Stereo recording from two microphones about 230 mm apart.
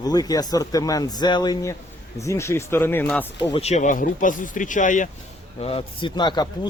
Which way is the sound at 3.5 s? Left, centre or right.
Left.